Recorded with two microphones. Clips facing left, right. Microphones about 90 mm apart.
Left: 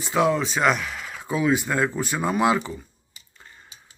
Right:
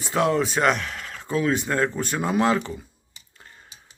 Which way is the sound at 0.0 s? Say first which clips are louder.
Even; centre (ahead or behind).